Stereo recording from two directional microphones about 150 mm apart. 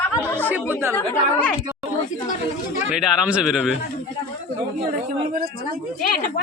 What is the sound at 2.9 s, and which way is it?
Speech, 5° right (ahead or behind).